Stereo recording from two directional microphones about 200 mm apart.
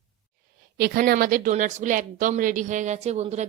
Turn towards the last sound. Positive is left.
turn(degrees=-35)  # may be behind; listen again after turning